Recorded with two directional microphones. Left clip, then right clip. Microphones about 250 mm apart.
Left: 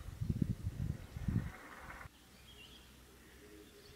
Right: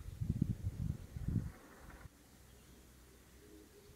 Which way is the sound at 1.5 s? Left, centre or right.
Centre.